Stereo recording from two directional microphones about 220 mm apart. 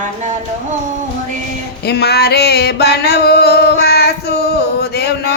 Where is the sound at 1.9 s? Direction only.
45° left (ahead or behind).